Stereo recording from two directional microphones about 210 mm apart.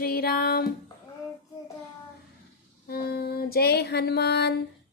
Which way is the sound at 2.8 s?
45° left (ahead or behind).